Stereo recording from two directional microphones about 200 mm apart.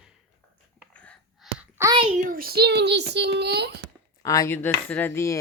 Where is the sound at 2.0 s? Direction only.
40° right (ahead or behind).